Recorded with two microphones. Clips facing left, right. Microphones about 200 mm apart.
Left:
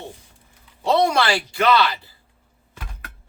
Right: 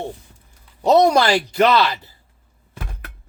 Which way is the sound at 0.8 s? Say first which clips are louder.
Right 5 dB; 40° right (ahead or behind).